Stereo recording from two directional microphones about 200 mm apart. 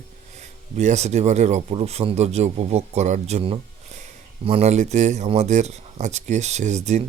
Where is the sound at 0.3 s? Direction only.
35° right (ahead or behind).